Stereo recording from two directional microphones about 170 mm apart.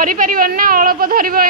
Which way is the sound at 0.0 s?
55° right (ahead or behind).